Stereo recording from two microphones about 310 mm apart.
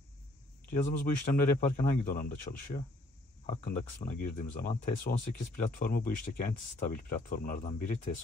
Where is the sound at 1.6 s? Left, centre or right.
Left.